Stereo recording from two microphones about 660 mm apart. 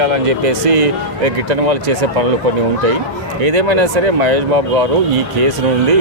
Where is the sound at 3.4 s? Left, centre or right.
Right.